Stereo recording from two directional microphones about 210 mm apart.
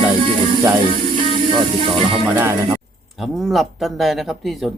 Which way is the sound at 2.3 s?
10° right (ahead or behind).